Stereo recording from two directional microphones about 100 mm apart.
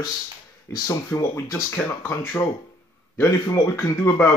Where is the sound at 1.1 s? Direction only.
30° left (ahead or behind).